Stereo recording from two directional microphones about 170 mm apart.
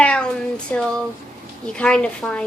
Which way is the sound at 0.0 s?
5° left (ahead or behind).